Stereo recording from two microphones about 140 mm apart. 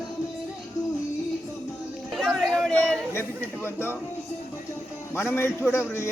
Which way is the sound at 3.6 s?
15° left (ahead or behind).